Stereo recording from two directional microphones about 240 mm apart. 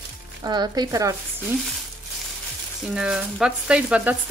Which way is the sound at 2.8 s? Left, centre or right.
Centre.